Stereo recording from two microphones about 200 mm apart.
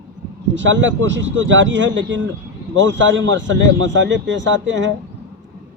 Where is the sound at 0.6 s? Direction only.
65° right (ahead or behind).